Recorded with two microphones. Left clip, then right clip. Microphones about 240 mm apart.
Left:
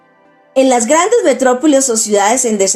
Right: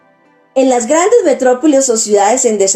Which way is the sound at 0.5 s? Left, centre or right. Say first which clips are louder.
Even; left.